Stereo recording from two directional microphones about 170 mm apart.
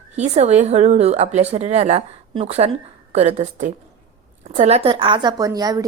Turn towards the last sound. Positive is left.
turn(degrees=-20)  # may be behind; listen again after turning